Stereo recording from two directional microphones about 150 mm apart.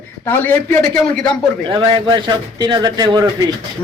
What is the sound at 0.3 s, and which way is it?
A man's voice, 15° left (ahead or behind).